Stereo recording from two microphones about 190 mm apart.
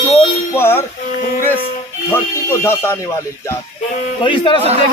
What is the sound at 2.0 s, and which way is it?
A man's voice, 10° left (ahead or behind).